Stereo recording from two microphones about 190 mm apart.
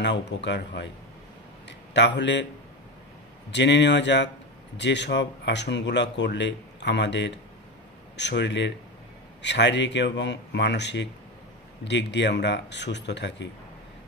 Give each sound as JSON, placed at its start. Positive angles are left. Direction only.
{"t": 0.0, "sound": "speech", "side_deg": 65}
{"t": 3.5, "sound": "a man's voice", "side_deg": 65}